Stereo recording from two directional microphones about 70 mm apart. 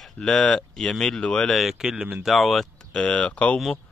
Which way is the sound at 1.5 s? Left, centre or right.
Centre.